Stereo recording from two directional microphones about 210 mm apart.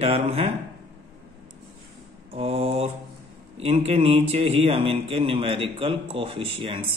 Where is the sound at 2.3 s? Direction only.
30° right (ahead or behind).